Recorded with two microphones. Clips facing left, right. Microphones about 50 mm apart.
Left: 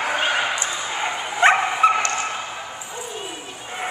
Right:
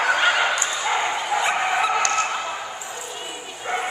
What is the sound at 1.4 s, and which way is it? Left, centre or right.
Dog, left.